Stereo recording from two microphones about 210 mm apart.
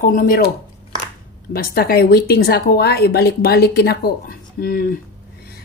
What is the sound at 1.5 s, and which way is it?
A woman's voice, 45° left (ahead or behind).